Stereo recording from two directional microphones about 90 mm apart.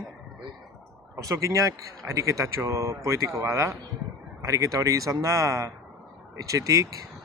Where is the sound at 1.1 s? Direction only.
40° right (ahead or behind).